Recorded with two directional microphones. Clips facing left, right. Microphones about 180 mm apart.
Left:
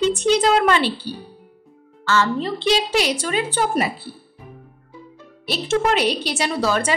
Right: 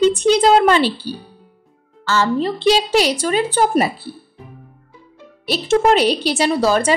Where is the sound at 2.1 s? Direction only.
35° right (ahead or behind).